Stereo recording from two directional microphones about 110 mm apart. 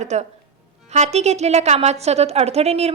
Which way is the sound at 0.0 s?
90° right.